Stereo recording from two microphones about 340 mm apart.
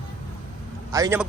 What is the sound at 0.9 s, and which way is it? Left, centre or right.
Speech, centre.